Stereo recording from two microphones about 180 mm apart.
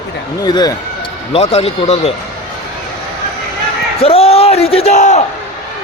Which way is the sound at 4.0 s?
35° left (ahead or behind).